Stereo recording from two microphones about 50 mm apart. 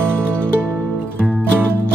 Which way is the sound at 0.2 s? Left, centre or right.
Right.